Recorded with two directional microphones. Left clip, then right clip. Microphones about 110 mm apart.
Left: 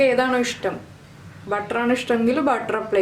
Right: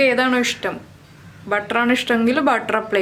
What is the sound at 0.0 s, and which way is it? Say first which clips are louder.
A woman's voice: right 2 dB; 25° right (ahead or behind).